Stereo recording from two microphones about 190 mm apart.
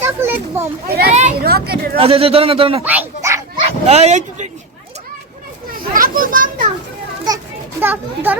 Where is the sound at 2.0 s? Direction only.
30° right (ahead or behind).